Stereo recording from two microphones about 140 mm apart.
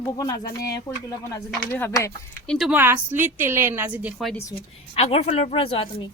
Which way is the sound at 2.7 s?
15° right (ahead or behind).